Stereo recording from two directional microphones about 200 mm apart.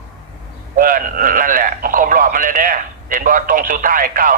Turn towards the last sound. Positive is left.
turn(degrees=-45)  # may be behind; listen again after turning